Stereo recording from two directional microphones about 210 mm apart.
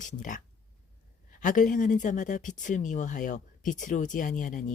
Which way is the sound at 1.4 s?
40° left (ahead or behind).